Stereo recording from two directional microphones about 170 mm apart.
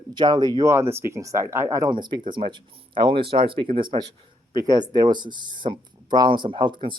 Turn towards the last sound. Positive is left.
turn(degrees=-30)  # may be behind; listen again after turning